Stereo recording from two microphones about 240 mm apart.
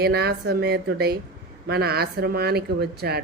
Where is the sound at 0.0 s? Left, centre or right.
Right.